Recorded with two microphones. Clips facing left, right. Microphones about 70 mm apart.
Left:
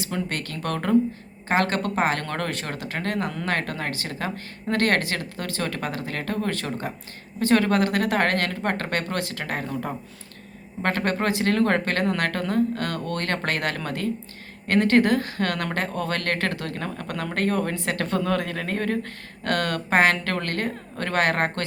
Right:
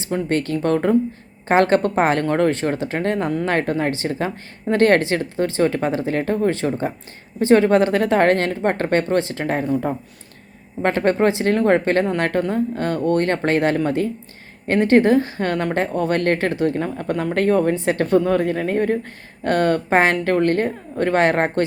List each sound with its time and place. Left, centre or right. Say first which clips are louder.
0.0 s speech: right 8 dB; right
10.8 s speech: right 7 dB; right